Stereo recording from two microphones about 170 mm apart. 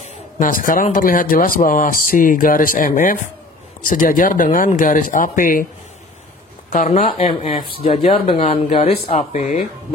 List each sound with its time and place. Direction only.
0.0 s a sound: 50° left (ahead or behind)
0.8 s speech: 50° left (ahead or behind)
6.7 s speech: 45° left (ahead or behind)
7.2 s speech: 30° left (ahead or behind)